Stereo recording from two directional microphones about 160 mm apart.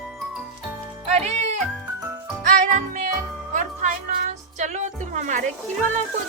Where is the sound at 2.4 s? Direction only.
55° right (ahead or behind).